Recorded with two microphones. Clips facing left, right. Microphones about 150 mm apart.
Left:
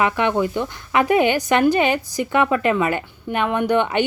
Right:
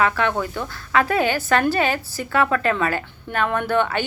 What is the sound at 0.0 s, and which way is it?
Speech, 15° left (ahead or behind).